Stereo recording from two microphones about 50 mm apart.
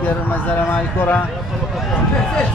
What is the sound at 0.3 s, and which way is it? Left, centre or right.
Speech, left.